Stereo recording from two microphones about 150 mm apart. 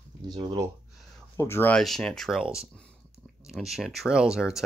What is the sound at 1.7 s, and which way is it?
Speech, 5° left (ahead or behind).